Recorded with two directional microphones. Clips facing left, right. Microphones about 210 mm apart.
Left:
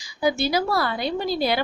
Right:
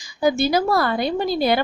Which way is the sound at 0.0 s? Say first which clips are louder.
Right 4 dB; 50° right (ahead or behind).